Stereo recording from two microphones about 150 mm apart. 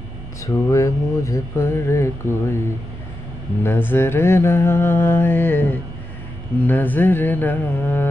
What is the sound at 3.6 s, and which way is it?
Music, 15° left (ahead or behind).